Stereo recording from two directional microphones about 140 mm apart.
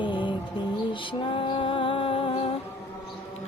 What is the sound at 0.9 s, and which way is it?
Music, 35° left (ahead or behind).